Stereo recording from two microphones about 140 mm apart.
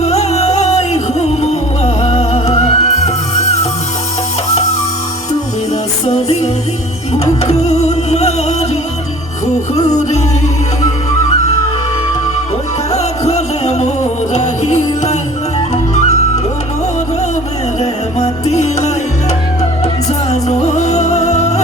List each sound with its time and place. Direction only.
0.0 s music: 50° left (ahead or behind)
6.1 s music: 50° left (ahead or behind)
9.8 s music: 55° left (ahead or behind)
12.9 s music: 50° left (ahead or behind)
17.7 s music: 50° left (ahead or behind)
20.3 s music: 50° left (ahead or behind)